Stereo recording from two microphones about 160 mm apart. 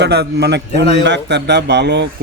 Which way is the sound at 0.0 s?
90° right.